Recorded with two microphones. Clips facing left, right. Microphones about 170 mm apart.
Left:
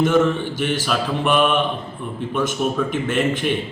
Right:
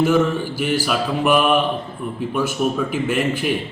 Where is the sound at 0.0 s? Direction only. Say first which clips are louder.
Even; 5° right (ahead or behind).